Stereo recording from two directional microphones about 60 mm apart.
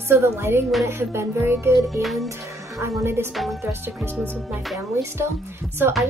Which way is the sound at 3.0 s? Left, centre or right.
Right.